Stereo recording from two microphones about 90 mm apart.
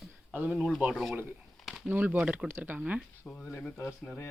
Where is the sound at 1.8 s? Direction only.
20° right (ahead or behind).